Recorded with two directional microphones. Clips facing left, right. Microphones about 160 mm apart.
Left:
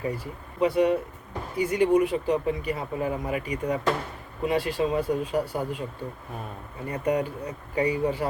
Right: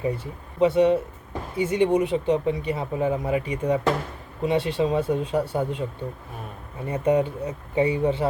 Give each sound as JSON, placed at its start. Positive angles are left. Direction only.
{"t": 0.6, "sound": "speech", "side_deg": -25}
{"t": 6.8, "sound": "speech", "side_deg": -25}